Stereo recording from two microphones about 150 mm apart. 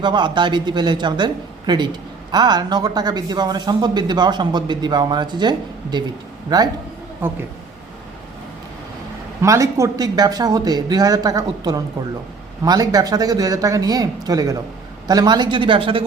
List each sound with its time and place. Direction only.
0.0 s speech: 30° right (ahead or behind)
9.4 s speech: 20° right (ahead or behind)